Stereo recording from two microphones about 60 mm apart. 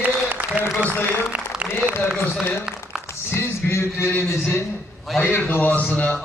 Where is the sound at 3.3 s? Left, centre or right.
Left.